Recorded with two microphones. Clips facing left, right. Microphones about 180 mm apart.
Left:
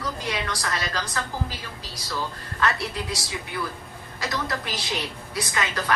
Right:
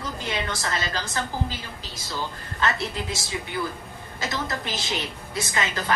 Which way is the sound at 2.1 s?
25° right (ahead or behind).